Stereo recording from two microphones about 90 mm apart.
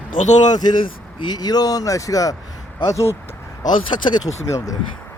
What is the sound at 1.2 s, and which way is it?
Speech, 50° left (ahead or behind).